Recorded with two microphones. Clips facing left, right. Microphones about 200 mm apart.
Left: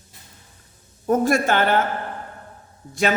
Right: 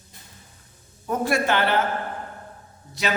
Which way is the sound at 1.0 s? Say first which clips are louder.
Left 4 dB; 45° left (ahead or behind).